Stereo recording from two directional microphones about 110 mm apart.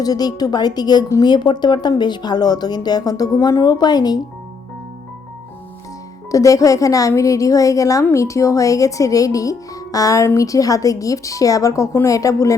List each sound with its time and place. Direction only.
0.0 s a woman's voice: 35° left (ahead or behind)
6.3 s a woman's voice: 30° left (ahead or behind)